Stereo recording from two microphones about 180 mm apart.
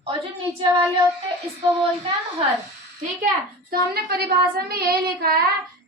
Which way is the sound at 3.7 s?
60° right (ahead or behind).